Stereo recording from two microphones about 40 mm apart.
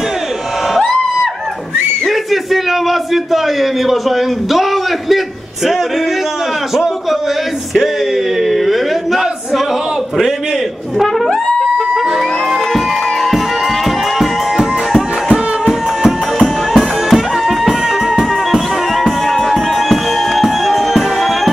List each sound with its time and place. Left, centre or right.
2.0 s a sound: centre
8.4 s a sound: centre
11.2 s brass instrument: centre
12.7 s music: centre
15.0 s music: centre
16.7 s music: centre